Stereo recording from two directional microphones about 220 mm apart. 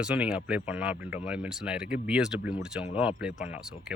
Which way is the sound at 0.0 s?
5° right (ahead or behind).